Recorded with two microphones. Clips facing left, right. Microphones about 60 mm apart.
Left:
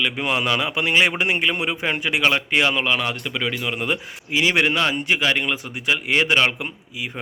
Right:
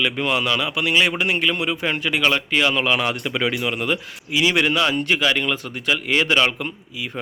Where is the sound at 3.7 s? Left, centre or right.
Centre.